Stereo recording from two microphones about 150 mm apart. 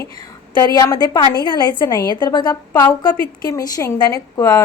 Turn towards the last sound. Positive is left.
turn(degrees=20)  # may be behind; listen again after turning